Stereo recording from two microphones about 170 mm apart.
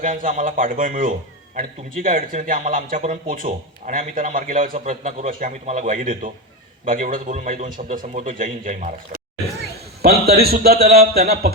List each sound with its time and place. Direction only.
0.0 s a man's voice: 50° right (ahead or behind)
10.3 s a man's voice: 65° right (ahead or behind)